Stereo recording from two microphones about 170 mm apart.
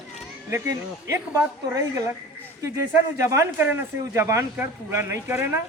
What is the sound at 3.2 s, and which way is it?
Speech, 15° right (ahead or behind).